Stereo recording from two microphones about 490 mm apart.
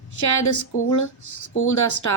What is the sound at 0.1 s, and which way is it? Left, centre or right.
Speech, left.